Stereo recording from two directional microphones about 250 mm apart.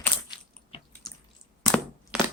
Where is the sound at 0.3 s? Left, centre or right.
Centre.